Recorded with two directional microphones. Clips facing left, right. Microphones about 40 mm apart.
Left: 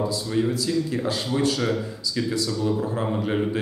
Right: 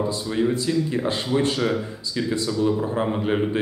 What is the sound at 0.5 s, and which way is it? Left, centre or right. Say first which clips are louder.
Speech: right 2 dB; right.